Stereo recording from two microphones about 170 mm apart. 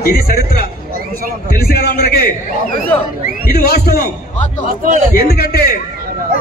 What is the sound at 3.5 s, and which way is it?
Speech, 65° left (ahead or behind).